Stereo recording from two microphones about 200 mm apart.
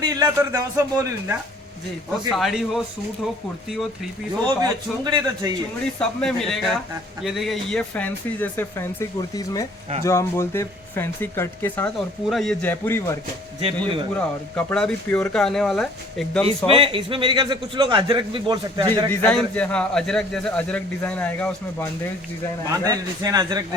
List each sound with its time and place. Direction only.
0.0 s a man's voice: 15° right (ahead or behind)
2.3 s speech: centre (ahead or behind)
4.6 s a man's voice: 20° right (ahead or behind)
6.0 s speech: centre (ahead or behind)
13.6 s a man's voice: 25° right (ahead or behind)
14.2 s speech: 5° left (ahead or behind)
16.6 s a man's voice: 25° right (ahead or behind)
19.1 s speech: 5° left (ahead or behind)
22.7 s a man's voice: 20° right (ahead or behind)